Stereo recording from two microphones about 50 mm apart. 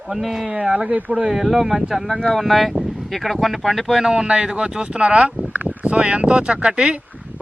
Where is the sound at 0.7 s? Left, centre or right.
Right.